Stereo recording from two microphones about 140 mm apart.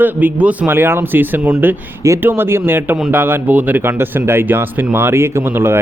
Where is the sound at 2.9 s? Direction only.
5° right (ahead or behind).